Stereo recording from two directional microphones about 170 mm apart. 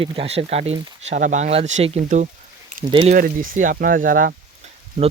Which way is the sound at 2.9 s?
30° right (ahead or behind).